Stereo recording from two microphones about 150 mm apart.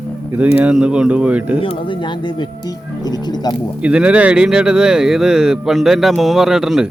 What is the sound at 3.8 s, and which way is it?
Speech, 5° right (ahead or behind).